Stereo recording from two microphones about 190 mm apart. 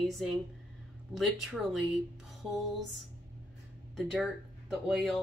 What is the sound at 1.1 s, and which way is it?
Speech, centre (ahead or behind).